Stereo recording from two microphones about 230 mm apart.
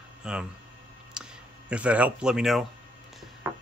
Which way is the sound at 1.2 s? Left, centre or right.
Centre.